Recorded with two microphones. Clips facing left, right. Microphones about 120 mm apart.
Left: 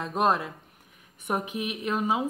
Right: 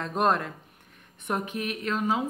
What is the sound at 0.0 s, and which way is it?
Speech, 5° left (ahead or behind).